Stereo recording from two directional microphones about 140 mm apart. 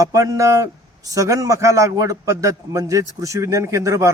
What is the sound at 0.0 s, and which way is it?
Speech, 25° right (ahead or behind).